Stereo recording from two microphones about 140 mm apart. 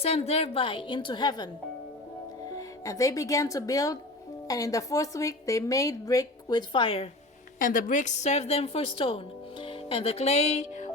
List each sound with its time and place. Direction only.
0.0 s a woman's voice: 45° left (ahead or behind); by 1.5 s 30° left (ahead or behind)
2.6 s a woman's voice: 25° left (ahead or behind); by 7.1 s 40° left (ahead or behind)
7.6 s a woman's voice: 75° left (ahead or behind); by 10.8 s 55° left (ahead or behind)